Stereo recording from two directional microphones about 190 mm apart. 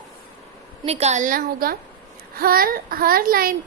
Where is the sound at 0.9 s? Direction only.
35° right (ahead or behind).